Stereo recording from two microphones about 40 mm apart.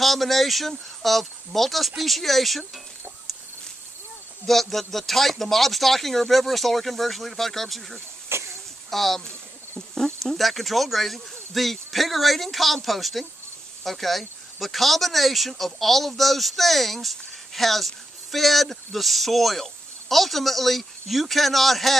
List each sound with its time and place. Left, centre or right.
0.0 s speech: centre
4.5 s speech: centre
8.3 s a sound: right
8.9 s speech: centre